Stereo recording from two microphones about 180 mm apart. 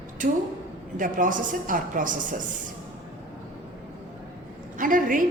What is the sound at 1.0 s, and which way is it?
A woman's voice, 45° right (ahead or behind).